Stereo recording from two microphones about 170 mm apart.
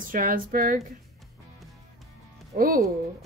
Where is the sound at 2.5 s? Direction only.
55° right (ahead or behind).